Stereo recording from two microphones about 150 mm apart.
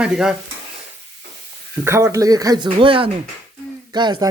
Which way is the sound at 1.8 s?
15° right (ahead or behind).